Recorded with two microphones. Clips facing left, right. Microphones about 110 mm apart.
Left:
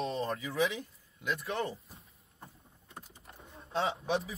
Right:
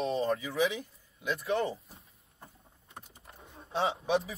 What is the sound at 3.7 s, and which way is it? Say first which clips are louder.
Speech: right 2 dB; centre (ahead or behind).